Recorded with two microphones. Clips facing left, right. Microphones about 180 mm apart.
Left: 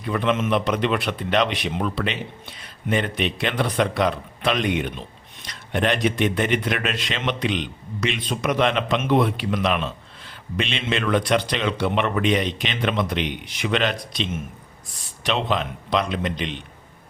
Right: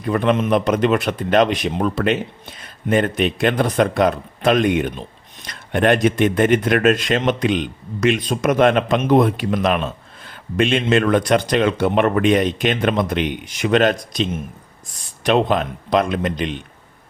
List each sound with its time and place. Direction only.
0.0 s speech: 45° right (ahead or behind)